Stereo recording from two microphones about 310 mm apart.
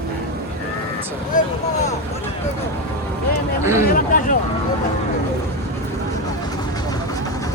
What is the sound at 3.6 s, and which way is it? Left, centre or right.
Speech, centre.